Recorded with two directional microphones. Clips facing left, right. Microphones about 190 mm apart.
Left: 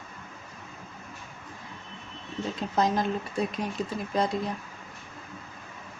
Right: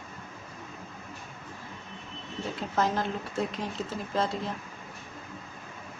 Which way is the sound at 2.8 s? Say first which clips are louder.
Left 3 dB; 15° left (ahead or behind).